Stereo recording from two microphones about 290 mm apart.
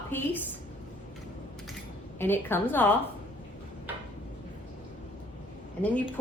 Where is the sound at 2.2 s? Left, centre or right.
Centre.